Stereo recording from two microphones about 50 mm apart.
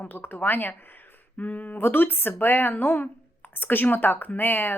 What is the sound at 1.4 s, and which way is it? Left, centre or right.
Speech, left.